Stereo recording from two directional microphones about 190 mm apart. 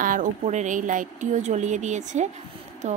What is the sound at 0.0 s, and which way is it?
A woman's voice, 45° right (ahead or behind).